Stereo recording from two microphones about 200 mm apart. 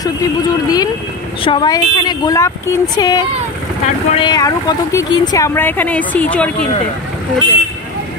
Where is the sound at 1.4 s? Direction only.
25° left (ahead or behind); by 6.7 s 5° left (ahead or behind).